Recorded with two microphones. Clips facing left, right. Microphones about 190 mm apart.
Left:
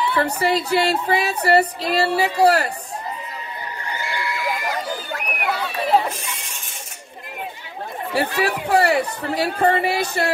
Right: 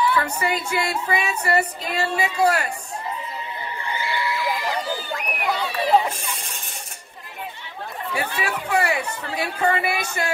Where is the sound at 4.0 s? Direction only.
Centre (ahead or behind).